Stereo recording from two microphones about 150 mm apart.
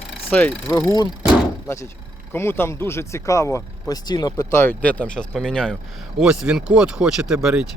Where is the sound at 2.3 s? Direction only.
15° left (ahead or behind).